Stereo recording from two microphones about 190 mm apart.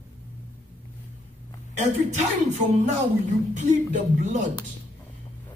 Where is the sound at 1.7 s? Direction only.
35° right (ahead or behind).